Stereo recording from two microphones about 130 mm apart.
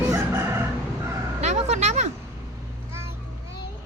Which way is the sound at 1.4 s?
65° right (ahead or behind).